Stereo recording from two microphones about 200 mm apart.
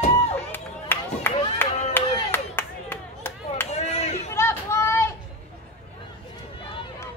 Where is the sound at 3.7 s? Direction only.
35° left (ahead or behind).